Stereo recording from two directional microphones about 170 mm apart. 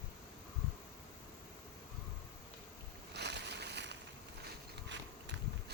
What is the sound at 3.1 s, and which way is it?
Boat, 85° right.